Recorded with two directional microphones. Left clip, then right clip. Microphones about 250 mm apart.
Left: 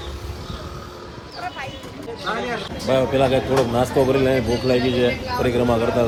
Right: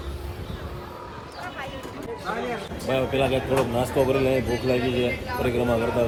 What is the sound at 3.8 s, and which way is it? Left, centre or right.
Speech, centre.